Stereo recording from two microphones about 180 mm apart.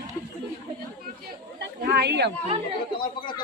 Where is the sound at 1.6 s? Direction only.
65° right (ahead or behind).